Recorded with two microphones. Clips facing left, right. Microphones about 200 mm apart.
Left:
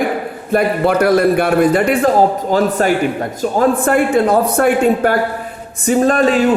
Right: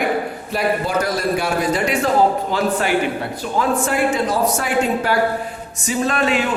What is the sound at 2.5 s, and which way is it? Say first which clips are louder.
A man's voice: left 5 dB; 45° left (ahead or behind).